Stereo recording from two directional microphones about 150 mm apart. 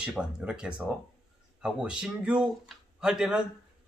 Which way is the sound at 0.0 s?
5° right (ahead or behind).